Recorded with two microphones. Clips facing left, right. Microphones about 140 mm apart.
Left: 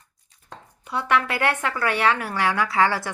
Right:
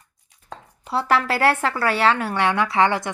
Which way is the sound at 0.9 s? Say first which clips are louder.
Right 2 dB; 35° right (ahead or behind).